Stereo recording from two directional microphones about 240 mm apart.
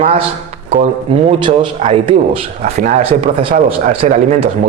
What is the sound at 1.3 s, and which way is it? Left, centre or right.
Speech, right.